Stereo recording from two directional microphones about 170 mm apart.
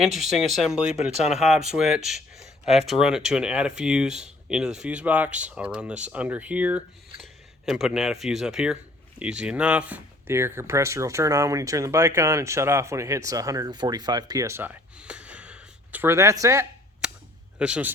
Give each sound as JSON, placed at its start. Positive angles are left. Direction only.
{"t": 0.0, "sound": "speech", "side_deg": 0}
{"t": 17.0, "sound": "cap gun", "side_deg": -5}
{"t": 17.6, "sound": "speech", "side_deg": -5}